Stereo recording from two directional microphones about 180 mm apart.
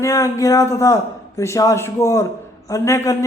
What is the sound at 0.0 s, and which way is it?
A man's voice, 20° left (ahead or behind).